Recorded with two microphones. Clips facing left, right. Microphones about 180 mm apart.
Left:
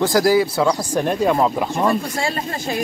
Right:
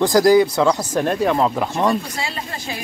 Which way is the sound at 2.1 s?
50° left (ahead or behind).